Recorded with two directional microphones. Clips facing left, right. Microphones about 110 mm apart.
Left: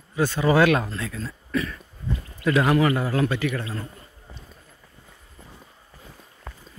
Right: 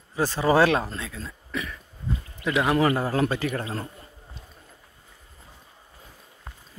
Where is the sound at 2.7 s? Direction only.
30° right (ahead or behind).